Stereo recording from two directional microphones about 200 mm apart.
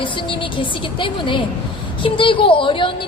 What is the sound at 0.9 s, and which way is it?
A woman's voice, 25° left (ahead or behind).